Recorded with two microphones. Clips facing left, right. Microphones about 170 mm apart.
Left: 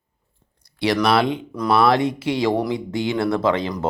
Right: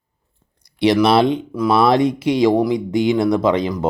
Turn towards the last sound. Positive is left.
turn(degrees=-15)  # may be behind; listen again after turning